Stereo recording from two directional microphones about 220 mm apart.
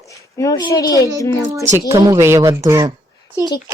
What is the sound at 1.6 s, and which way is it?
Speech, 10° right (ahead or behind).